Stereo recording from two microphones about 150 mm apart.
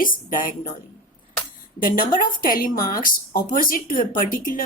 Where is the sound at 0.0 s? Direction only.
65° left (ahead or behind).